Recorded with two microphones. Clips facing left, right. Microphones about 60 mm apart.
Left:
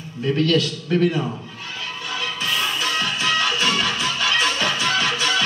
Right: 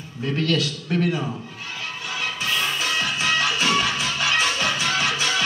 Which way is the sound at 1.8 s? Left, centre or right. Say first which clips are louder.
Left 1 dB; right.